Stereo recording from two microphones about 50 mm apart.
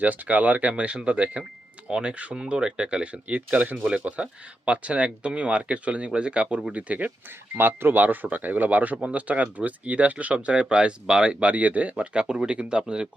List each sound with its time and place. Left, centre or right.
0.0 s speech: right
7.5 s speech: right